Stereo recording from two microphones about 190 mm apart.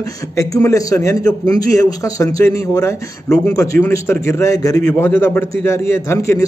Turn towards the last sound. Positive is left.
turn(degrees=15)  # may be behind; listen again after turning